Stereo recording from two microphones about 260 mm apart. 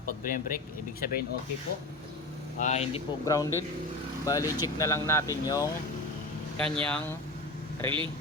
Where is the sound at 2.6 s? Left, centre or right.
Left; by 5.2 s centre.